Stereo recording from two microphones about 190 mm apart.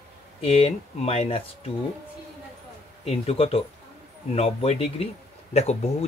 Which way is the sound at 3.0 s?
30° left (ahead or behind).